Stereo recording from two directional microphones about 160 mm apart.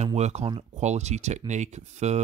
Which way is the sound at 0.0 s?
45° right (ahead or behind).